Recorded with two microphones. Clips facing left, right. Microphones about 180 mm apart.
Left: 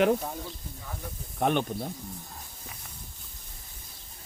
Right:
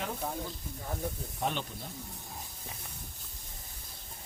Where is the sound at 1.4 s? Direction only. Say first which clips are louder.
Left 9 dB; 60° left (ahead or behind).